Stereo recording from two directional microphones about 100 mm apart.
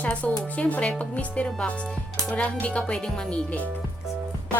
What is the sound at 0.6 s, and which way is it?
Speech, 10° left (ahead or behind).